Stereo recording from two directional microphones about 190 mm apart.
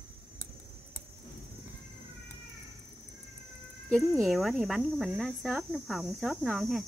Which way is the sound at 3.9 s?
Centre (ahead or behind).